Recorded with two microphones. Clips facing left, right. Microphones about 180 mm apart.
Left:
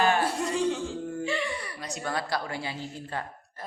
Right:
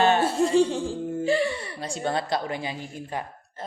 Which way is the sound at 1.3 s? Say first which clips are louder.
Right 7 dB; 35° right (ahead or behind).